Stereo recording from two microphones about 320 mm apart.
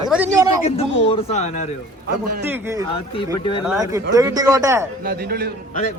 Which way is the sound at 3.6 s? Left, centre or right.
Centre.